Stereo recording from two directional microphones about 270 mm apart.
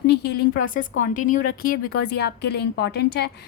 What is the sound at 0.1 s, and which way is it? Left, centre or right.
A woman's voice, left.